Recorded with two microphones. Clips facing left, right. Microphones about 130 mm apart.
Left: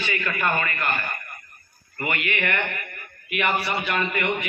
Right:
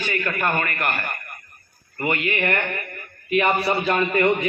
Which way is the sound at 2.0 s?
30° right (ahead or behind).